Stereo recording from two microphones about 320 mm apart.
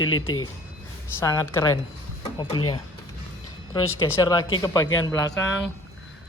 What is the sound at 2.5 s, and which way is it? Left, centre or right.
Speech, left.